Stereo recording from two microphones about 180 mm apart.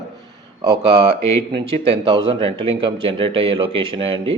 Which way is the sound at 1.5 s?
30° right (ahead or behind).